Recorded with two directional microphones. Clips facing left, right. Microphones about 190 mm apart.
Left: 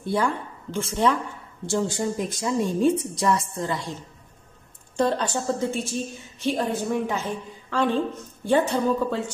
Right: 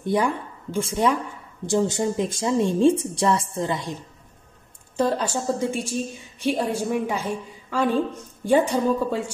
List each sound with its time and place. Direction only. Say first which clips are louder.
0.0 s a woman's voice: right 2 dB; 15° right (ahead or behind)
4.9 s a woman's voice: right 1 dB; 5° right (ahead or behind)